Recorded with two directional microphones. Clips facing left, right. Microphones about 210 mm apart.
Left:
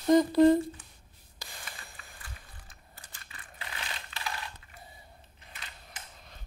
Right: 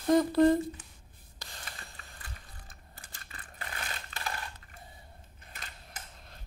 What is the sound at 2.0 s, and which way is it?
Mechanisms, 40° right (ahead or behind).